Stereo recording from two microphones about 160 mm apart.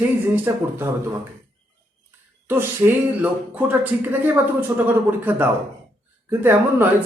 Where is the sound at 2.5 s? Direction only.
15° right (ahead or behind).